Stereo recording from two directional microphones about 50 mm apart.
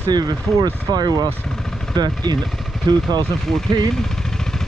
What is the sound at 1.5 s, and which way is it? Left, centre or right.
Vehicle, centre.